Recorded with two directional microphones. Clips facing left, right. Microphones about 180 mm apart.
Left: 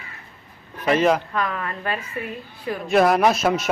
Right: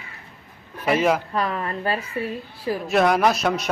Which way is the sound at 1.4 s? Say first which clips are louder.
Right 1 dB; 35° right (ahead or behind).